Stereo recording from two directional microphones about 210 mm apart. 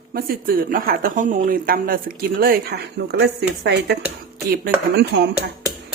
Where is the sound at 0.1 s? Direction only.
45° right (ahead or behind).